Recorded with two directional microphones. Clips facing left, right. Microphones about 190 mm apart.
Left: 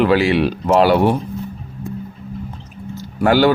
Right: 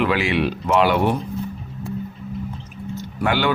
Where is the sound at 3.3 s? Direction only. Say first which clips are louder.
Left 7 dB; 40° left (ahead or behind).